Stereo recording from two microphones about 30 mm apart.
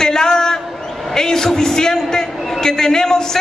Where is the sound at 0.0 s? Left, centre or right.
Left.